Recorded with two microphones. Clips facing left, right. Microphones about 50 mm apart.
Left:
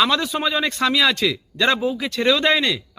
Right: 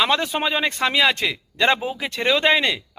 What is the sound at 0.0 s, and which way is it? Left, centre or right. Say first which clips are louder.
A man's voice: left 1 dB; right.